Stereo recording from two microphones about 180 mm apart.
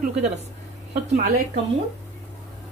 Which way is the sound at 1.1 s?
45° right (ahead or behind).